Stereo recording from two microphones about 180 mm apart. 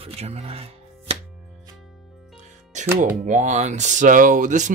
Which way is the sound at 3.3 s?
45° right (ahead or behind).